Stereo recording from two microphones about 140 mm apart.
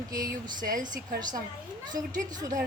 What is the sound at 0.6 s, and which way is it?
Speech, 75° right (ahead or behind).